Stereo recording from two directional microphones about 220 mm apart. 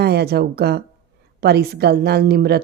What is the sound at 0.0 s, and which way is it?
Speech, 45° right (ahead or behind).